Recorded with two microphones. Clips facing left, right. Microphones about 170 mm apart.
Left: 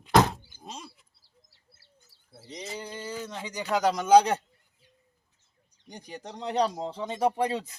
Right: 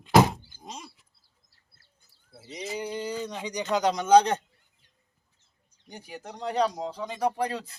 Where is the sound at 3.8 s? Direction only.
5° left (ahead or behind).